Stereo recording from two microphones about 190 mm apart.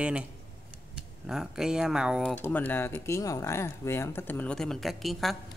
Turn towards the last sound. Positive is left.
turn(degrees=0)  # may be behind; listen again after turning